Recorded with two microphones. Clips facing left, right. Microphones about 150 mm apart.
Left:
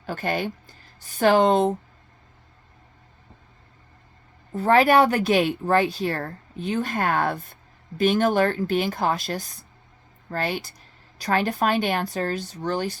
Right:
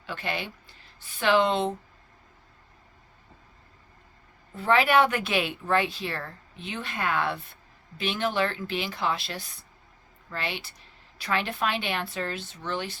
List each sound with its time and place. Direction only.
0.0 s speech: 45° left (ahead or behind)
4.5 s speech: 40° left (ahead or behind)